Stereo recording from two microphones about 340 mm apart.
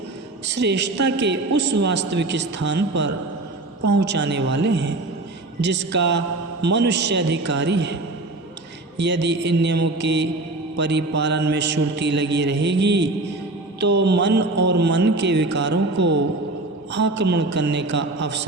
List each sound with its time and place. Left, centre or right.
0.4 s a man's voice: right
9.0 s a man's voice: right